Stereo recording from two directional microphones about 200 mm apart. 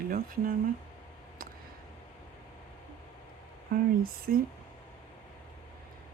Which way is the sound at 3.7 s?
45° right (ahead or behind).